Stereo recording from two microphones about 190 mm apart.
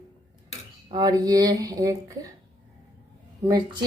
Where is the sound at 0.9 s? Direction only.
20° right (ahead or behind).